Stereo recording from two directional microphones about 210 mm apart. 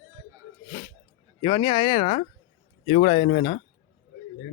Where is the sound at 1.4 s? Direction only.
25° left (ahead or behind).